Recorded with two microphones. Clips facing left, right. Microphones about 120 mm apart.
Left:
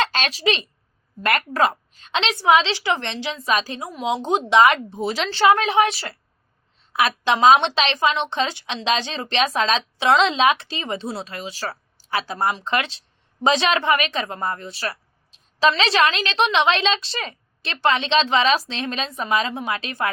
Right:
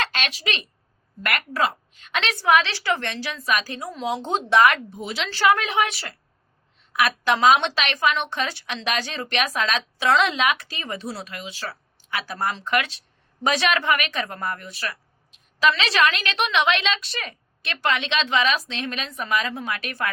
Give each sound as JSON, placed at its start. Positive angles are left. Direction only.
{"t": 0.0, "sound": "a sound", "side_deg": 30}
{"t": 1.5, "sound": "a woman's voice", "side_deg": 40}
{"t": 2.1, "sound": "a woman's voice", "side_deg": 20}
{"t": 3.8, "sound": "speech", "side_deg": 15}
{"t": 4.9, "sound": "a woman's voice", "side_deg": 40}
{"t": 5.3, "sound": "a woman's voice", "side_deg": 25}